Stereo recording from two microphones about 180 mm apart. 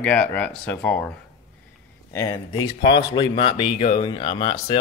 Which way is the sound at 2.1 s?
20° left (ahead or behind).